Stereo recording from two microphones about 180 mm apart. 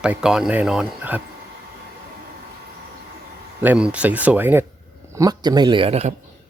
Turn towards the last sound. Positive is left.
turn(degrees=-35)  # may be behind; listen again after turning